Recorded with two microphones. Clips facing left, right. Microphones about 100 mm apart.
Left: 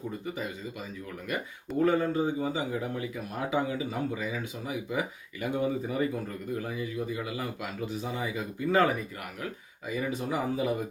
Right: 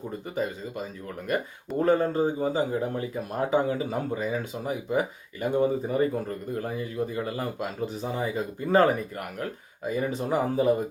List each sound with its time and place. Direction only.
1.8 s a man's voice: 35° right (ahead or behind)